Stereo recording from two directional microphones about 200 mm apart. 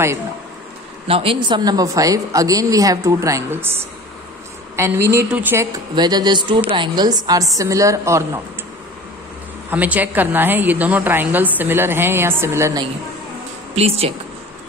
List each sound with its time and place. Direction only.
1.0 s a woman's voice: 25° right (ahead or behind); by 3.7 s 10° right (ahead or behind)
4.7 s a woman's voice: 15° right (ahead or behind)
9.7 s a woman's voice: 10° right (ahead or behind)
13.7 s a woman's voice: 30° right (ahead or behind)